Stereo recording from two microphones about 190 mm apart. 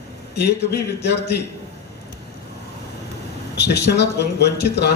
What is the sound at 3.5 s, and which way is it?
A man's voice, 60° left (ahead or behind).